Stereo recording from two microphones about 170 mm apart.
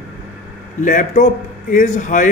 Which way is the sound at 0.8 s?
50° left (ahead or behind).